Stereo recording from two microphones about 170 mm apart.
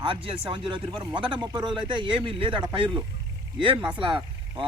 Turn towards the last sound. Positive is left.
turn(degrees=-30)  # may be behind; listen again after turning